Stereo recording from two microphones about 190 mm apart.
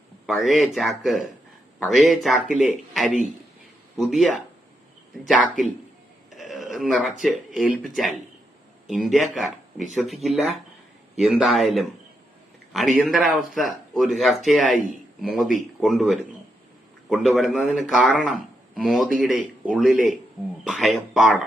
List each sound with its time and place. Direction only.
0.3 s speech: centre (ahead or behind)